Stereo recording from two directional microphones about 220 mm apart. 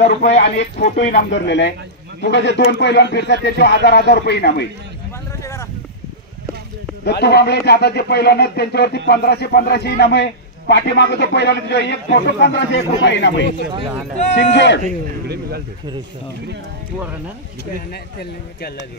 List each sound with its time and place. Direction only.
0.2 s speech: 55° left (ahead or behind)
5.4 s a sound: 15° left (ahead or behind)
7.1 s speech: 50° left (ahead or behind)
15.2 s speech: 45° right (ahead or behind)